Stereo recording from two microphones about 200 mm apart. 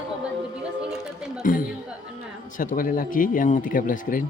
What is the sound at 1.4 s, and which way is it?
A man's voice, 40° left (ahead or behind).